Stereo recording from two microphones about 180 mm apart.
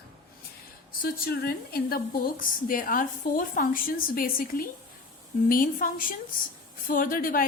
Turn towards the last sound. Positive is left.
turn(degrees=50)  # may be behind; listen again after turning